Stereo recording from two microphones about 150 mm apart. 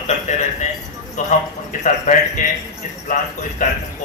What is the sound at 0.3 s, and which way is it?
Speech, 55° left (ahead or behind).